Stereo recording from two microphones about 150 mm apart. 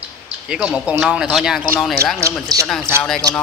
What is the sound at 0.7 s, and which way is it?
Speech, 5° right (ahead or behind).